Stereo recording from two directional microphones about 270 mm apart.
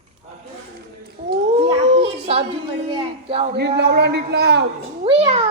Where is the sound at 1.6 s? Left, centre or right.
Right.